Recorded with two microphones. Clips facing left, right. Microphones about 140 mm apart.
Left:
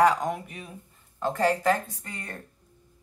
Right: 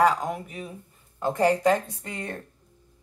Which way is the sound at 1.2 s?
15° right (ahead or behind).